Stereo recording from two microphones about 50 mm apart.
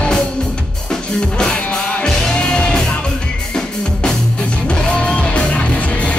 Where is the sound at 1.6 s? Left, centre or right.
Left.